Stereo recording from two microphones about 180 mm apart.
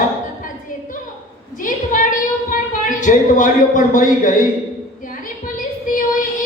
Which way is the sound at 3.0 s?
45° left (ahead or behind).